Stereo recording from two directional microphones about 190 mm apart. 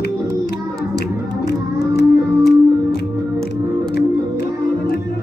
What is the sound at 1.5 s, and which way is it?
Music, 60° left (ahead or behind).